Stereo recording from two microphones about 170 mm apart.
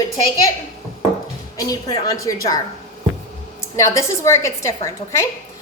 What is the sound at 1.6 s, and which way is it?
A woman's voice, 20° left (ahead or behind).